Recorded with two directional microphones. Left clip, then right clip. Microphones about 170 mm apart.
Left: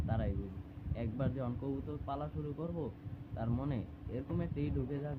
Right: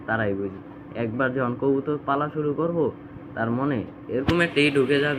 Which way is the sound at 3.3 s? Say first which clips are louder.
Right 16 dB; 15° left (ahead or behind).